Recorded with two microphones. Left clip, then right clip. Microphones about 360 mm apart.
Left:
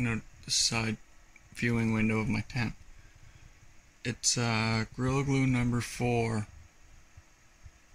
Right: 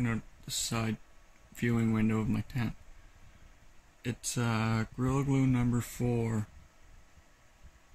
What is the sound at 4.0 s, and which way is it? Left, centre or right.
Speech, centre.